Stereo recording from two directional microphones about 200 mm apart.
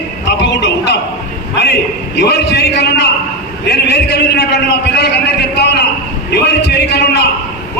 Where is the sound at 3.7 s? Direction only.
60° left (ahead or behind).